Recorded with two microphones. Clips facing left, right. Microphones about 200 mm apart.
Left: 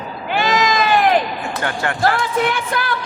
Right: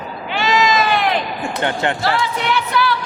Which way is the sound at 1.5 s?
20° right (ahead or behind).